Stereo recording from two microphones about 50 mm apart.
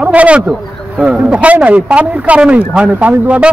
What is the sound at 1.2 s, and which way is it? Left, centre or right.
Speech, right.